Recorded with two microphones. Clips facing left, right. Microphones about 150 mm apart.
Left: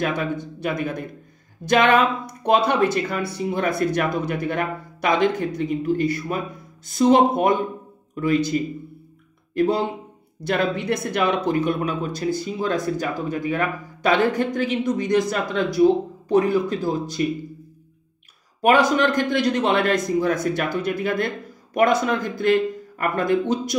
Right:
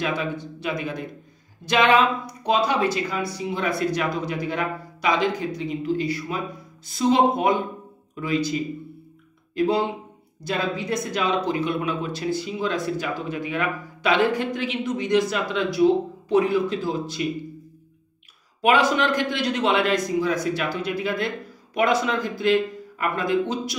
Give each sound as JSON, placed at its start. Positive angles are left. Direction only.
{"t": 0.0, "sound": "a man's voice", "side_deg": 50}
{"t": 9.5, "sound": "speech", "side_deg": 50}
{"t": 10.4, "sound": "speech", "side_deg": 60}
{"t": 18.6, "sound": "a man's voice", "side_deg": 45}